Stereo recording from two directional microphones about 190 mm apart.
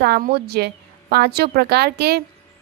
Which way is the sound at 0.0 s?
55° right (ahead or behind).